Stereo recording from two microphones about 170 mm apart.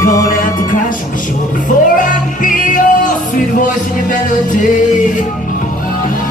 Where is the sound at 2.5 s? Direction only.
50° left (ahead or behind).